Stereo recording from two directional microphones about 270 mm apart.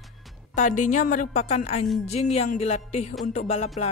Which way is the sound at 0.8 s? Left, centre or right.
Left.